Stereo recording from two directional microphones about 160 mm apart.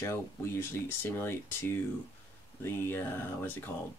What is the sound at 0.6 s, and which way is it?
Speech, 15° left (ahead or behind).